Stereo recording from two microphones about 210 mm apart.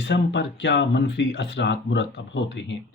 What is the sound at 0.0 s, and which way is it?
Speech, 55° left (ahead or behind).